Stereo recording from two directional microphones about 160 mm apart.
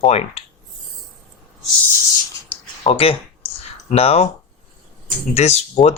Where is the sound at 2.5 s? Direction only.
40° left (ahead or behind).